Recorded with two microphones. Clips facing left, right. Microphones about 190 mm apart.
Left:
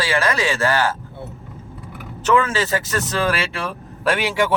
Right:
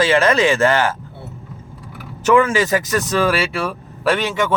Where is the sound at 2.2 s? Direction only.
15° right (ahead or behind).